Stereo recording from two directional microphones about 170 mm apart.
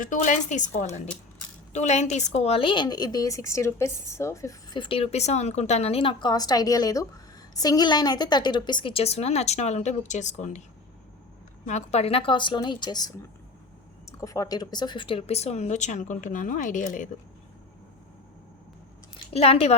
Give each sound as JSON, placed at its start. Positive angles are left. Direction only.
{"t": 0.0, "sound": "a woman's voice", "side_deg": 50}
{"t": 11.7, "sound": "speech", "side_deg": 40}
{"t": 19.3, "sound": "speech", "side_deg": 35}